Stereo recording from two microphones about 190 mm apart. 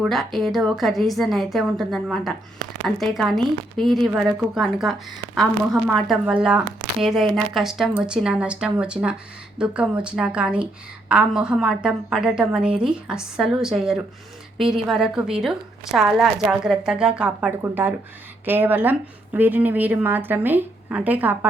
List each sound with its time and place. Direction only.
0.0 s a woman's voice: centre (ahead or behind)